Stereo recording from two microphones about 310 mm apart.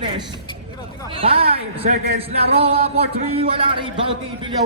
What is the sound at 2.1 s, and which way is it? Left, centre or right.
Music, centre.